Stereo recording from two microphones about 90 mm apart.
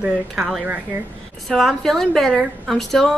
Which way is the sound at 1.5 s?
5° left (ahead or behind).